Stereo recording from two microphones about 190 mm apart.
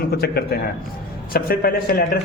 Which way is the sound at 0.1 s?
55° left (ahead or behind).